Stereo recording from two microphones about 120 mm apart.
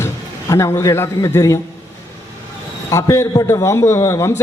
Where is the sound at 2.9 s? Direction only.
25° left (ahead or behind).